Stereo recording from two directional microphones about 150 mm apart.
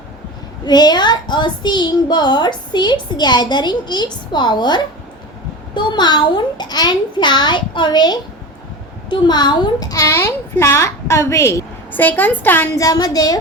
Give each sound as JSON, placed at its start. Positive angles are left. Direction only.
{"t": 0.6, "sound": "a woman's voice", "side_deg": 25}